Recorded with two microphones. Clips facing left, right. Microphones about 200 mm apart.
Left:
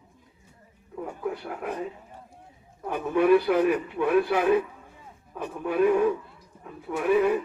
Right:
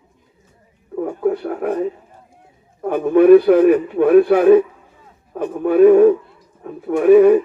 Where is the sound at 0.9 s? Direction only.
60° right (ahead or behind).